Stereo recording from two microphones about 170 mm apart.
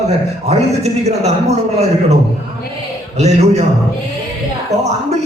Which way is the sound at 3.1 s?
40° right (ahead or behind).